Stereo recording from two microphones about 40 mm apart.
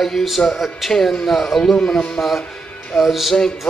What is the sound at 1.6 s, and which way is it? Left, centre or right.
Speech, centre.